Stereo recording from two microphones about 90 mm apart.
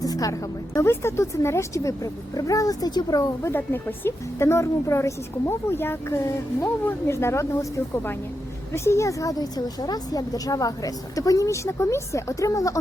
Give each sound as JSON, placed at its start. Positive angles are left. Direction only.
{"t": 0.0, "sound": "a woman's voice", "side_deg": 40}
{"t": 3.5, "sound": "a woman's voice", "side_deg": 25}